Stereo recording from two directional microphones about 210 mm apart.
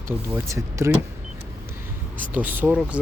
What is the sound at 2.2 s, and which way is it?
Speech, 10° right (ahead or behind).